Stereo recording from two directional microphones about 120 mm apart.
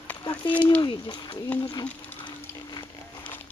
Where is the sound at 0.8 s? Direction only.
40° left (ahead or behind).